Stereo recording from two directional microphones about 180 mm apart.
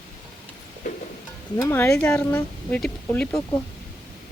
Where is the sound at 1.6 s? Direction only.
15° left (ahead or behind).